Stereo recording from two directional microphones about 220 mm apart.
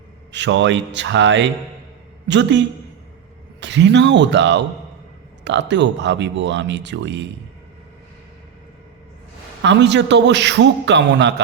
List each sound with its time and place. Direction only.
0.3 s speech: 55° right (ahead or behind)
9.6 s speech: 50° right (ahead or behind)